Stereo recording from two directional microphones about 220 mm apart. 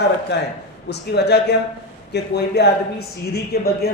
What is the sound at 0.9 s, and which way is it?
Speech, 50° left (ahead or behind).